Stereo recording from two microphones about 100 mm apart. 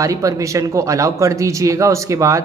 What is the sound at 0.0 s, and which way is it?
A man's voice, 35° right (ahead or behind).